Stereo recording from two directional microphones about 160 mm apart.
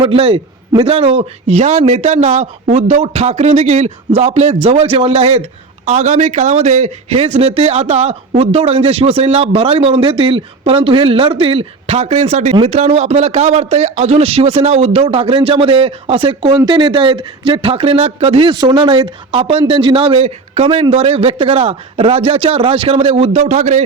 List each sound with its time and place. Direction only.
0.0 s a man's voice: 35° right (ahead or behind)